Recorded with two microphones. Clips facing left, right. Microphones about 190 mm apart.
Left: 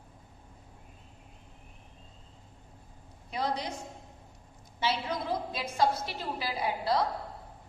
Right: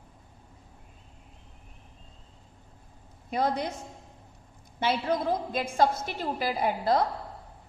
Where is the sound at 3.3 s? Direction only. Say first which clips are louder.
Right 5 dB; 50° right (ahead or behind).